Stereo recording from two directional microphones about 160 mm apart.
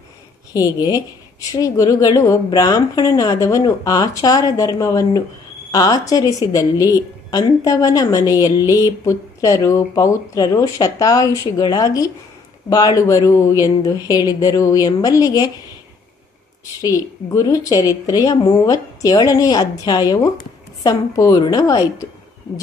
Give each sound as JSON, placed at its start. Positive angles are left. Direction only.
{"t": 0.5, "sound": "a woman's voice", "side_deg": 25}
{"t": 16.8, "sound": "a woman's voice", "side_deg": 20}